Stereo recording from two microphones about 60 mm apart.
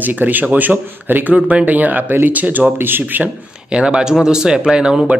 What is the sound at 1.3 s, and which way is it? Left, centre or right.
Speech, centre.